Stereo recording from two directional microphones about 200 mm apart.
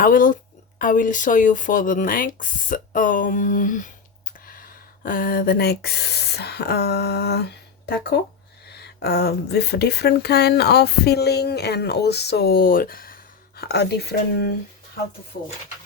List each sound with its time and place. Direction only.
0.0 s speech: 45° left (ahead or behind)